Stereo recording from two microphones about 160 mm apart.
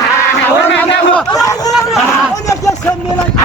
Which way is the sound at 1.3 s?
20° left (ahead or behind).